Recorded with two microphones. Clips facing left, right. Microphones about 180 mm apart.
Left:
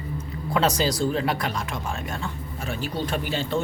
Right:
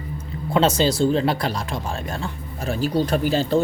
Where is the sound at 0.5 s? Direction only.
25° right (ahead or behind).